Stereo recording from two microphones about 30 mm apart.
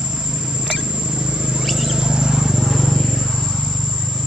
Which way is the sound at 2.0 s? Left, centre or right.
Right.